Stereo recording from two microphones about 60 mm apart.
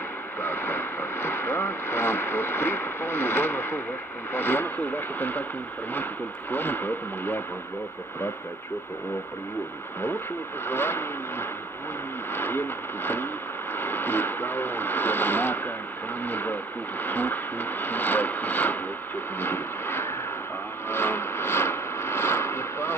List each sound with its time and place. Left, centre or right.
0.4 s speech: left
6.5 s speech: left
10.7 s speech: left
19.4 s a sound: left